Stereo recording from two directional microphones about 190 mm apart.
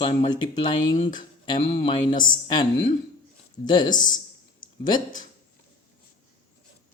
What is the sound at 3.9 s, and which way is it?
Speech, 45° left (ahead or behind).